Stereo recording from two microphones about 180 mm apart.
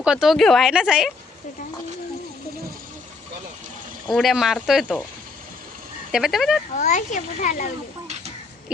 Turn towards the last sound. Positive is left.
turn(degrees=45)  # may be behind; listen again after turning